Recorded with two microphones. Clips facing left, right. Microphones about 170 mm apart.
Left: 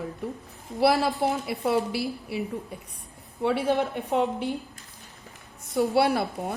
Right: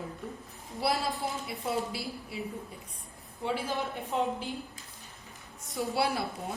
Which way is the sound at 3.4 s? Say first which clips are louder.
Left 8 dB; 65° left (ahead or behind).